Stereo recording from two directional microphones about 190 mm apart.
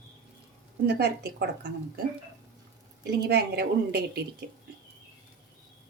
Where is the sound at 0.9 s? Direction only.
60° right (ahead or behind).